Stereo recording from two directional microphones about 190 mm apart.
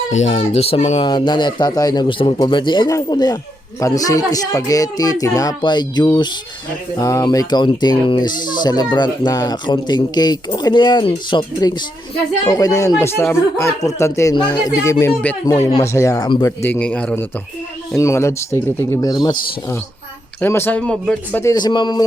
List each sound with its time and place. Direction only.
0.1 s speech: 35° left (ahead or behind); by 16.6 s 20° left (ahead or behind)
16.6 s speech: 10° left (ahead or behind)
21.4 s speech: 20° left (ahead or behind)